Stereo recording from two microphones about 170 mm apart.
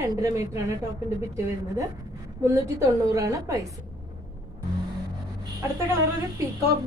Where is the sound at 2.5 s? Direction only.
20° right (ahead or behind).